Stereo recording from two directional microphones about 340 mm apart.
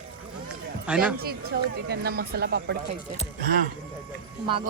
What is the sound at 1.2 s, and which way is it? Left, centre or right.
Speech, right.